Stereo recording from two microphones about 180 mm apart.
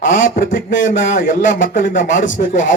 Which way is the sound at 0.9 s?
45° left (ahead or behind).